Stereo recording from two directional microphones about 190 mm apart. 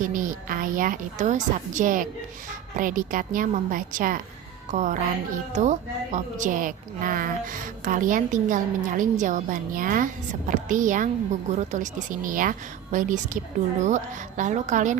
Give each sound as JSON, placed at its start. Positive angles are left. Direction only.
{"t": 0.0, "sound": "a woman's voice", "side_deg": -45}